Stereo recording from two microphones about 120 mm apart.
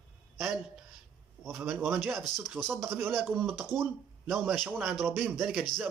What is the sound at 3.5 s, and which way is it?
Speech, 20° right (ahead or behind).